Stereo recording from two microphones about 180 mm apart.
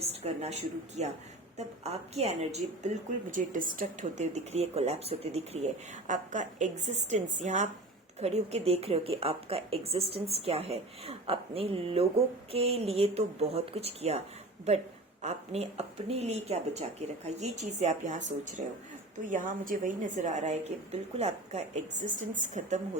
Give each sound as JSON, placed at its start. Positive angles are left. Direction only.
{"t": 0.0, "sound": "a woman's voice", "side_deg": -35}
{"t": 15.2, "sound": "a woman's voice", "side_deg": -40}